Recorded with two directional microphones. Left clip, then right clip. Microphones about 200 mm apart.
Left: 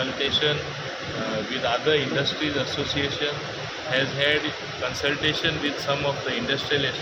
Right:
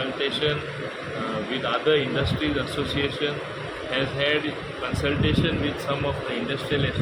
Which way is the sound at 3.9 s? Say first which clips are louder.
Left 2 dB; centre (ahead or behind).